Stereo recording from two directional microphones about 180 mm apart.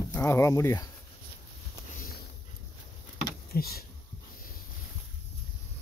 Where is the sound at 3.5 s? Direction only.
60° left (ahead or behind).